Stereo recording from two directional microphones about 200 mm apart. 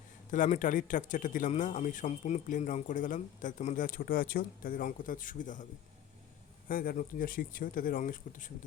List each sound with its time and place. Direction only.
0.3 s a man's voice: 40° left (ahead or behind)
6.7 s speech: 45° left (ahead or behind)